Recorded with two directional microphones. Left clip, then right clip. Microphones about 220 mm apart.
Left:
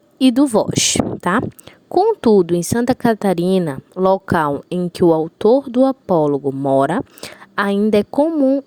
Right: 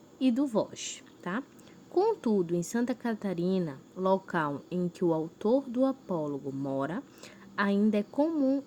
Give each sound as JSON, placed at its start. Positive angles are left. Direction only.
{"t": 0.2, "sound": "speech", "side_deg": 45}